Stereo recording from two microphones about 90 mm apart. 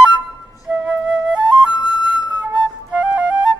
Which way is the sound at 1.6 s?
55° right (ahead or behind).